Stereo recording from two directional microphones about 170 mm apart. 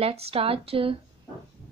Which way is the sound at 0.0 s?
35° right (ahead or behind).